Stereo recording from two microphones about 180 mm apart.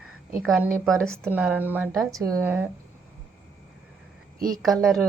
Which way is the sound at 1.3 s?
10° right (ahead or behind).